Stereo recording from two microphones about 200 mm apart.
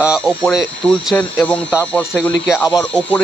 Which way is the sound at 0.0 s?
Centre (ahead or behind).